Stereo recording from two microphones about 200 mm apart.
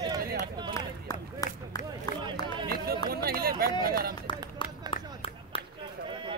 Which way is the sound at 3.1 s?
50° right (ahead or behind).